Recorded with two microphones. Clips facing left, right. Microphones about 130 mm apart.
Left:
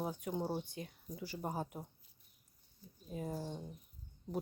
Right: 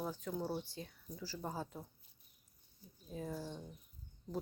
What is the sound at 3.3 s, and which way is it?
Speech, 40° left (ahead or behind).